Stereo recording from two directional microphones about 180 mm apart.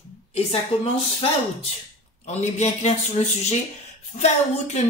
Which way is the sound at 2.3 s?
40° left (ahead or behind).